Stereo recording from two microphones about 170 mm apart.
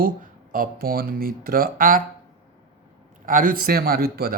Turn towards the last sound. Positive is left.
turn(degrees=-60)  # may be behind; listen again after turning